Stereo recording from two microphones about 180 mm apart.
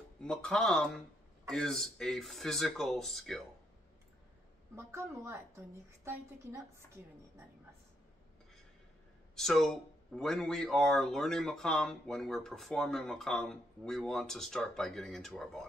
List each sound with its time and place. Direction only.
0.2 s speech: 5° left (ahead or behind)
4.7 s a woman's voice: 15° right (ahead or behind)
9.3 s speech: centre (ahead or behind)